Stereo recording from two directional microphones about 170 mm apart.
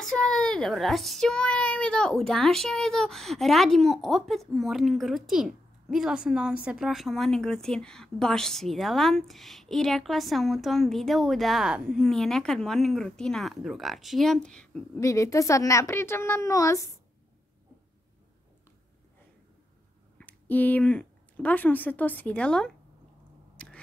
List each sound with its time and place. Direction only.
0.0 s a child's voice: 5° left (ahead or behind)
15.0 s a woman's voice: 20° left (ahead or behind)
20.2 s speech: 10° left (ahead or behind)
23.5 s biting: 5° left (ahead or behind)